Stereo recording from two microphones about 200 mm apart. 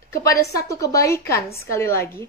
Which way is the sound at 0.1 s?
15° left (ahead or behind).